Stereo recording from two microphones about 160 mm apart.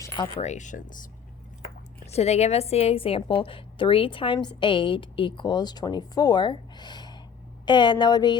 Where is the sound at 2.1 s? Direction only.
40° left (ahead or behind); by 8.4 s 25° left (ahead or behind).